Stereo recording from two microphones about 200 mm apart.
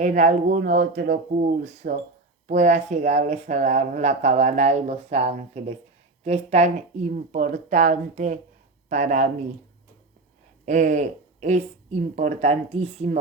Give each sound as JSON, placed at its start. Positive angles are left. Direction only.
{"t": 0.0, "sound": "speech", "side_deg": -40}
{"t": 10.7, "sound": "speech", "side_deg": -40}